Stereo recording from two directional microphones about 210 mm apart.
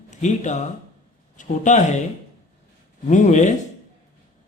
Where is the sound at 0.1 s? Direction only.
35° left (ahead or behind).